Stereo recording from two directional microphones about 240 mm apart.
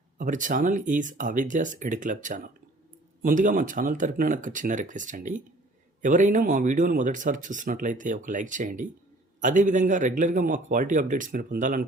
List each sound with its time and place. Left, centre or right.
0.2 s speech: right